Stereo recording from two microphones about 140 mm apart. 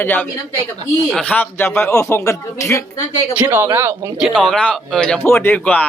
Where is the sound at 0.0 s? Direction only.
15° left (ahead or behind).